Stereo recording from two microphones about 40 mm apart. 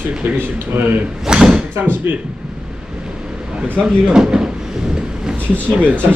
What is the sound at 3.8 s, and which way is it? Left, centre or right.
Speech, right.